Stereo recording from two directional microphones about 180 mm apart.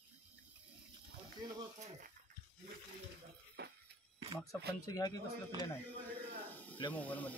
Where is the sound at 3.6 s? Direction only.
70° right (ahead or behind).